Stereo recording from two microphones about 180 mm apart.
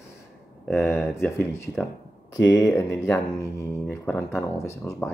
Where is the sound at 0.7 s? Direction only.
15° left (ahead or behind).